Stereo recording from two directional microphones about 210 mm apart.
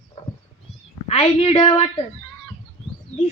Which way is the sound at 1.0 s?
30° left (ahead or behind).